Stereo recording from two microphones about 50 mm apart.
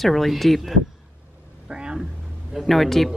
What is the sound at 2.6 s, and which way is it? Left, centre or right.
Speech, centre.